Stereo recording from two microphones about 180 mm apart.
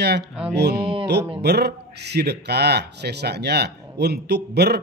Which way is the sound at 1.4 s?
65° right (ahead or behind).